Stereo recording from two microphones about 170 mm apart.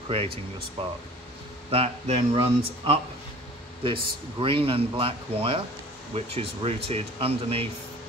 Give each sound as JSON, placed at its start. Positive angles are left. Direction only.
{"t": 1.7, "sound": "speech", "side_deg": -35}